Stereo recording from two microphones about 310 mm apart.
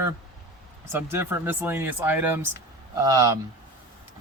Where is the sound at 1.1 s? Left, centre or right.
Centre.